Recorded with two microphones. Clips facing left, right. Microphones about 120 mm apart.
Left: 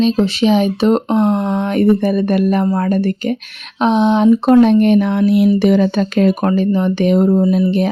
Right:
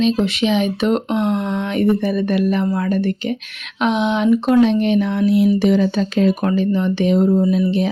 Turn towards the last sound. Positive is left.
turn(degrees=50)  # may be behind; listen again after turning